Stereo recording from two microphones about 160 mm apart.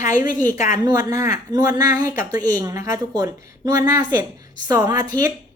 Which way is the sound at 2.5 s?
20° right (ahead or behind).